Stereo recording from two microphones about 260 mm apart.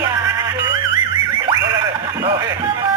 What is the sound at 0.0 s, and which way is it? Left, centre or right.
Music, centre.